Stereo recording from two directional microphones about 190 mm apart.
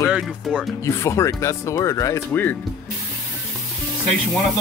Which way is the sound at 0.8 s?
15° left (ahead or behind).